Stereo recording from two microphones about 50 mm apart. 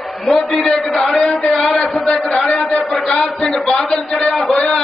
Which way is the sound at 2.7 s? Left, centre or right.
Centre.